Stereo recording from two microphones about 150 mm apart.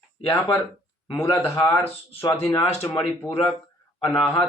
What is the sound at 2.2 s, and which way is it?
Speech, 35° left (ahead or behind).